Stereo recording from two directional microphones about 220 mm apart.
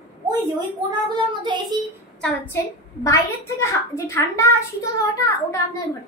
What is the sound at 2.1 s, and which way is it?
A child's voice, 5° left (ahead or behind).